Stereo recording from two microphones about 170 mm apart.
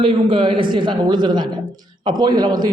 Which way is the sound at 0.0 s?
30° right (ahead or behind).